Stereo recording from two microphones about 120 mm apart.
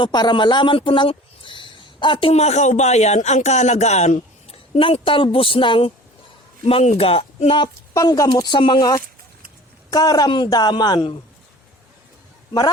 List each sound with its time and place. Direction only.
0.0 s a man's voice: 40° left (ahead or behind)
2.3 s speech: 70° left (ahead or behind); by 5.9 s 45° left (ahead or behind)
6.7 s speech: 55° left (ahead or behind)
7.9 s speech: 30° left (ahead or behind)
8.3 s a man's voice: 40° left (ahead or behind)